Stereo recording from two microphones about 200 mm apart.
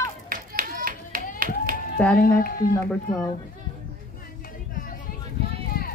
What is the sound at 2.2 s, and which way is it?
Speech, 50° left (ahead or behind).